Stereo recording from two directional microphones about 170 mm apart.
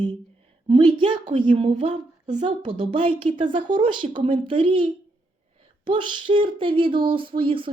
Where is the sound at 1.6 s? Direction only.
40° right (ahead or behind).